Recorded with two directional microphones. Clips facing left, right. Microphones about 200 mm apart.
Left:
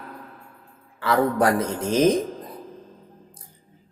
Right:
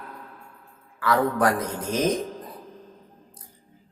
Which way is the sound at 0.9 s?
25° left (ahead or behind).